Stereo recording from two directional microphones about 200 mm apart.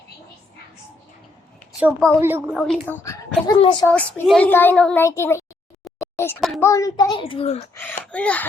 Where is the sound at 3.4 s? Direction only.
25° left (ahead or behind).